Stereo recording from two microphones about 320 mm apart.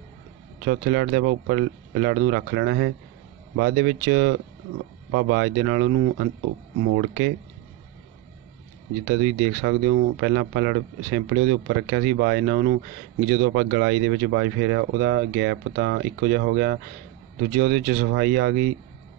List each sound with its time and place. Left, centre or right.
0.7 s speech: right
9.2 s speech: right